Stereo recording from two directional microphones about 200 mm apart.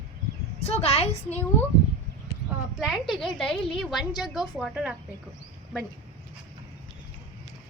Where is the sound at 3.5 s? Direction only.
25° left (ahead or behind).